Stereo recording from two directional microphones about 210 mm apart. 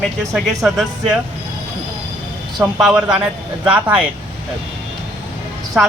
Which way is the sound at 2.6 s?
5° right (ahead or behind).